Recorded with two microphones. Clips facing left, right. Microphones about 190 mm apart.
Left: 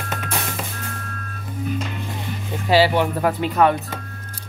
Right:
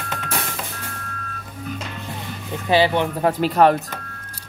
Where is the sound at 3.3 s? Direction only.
35° right (ahead or behind).